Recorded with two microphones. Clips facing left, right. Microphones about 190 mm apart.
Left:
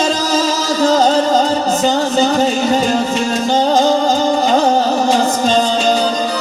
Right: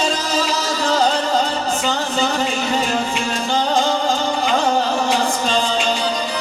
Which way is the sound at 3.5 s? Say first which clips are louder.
Left 6 dB; 40° left (ahead or behind).